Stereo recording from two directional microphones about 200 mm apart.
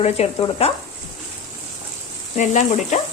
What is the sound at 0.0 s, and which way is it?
Speech, 30° left (ahead or behind).